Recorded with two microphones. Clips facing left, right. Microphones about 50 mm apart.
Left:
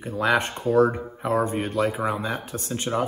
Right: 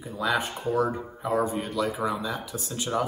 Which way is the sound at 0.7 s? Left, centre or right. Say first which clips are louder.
Left 7 dB; left.